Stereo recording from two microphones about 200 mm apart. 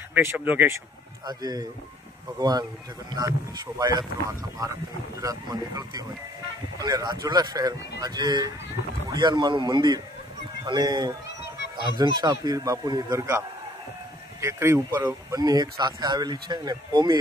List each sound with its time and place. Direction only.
0.1 s speech: 10° right (ahead or behind)
14.4 s speech: 15° right (ahead or behind)